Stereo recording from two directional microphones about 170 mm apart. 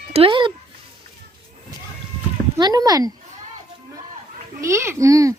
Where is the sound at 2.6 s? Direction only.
25° right (ahead or behind).